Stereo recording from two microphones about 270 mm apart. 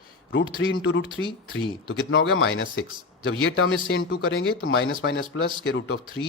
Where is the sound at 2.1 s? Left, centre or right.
Left.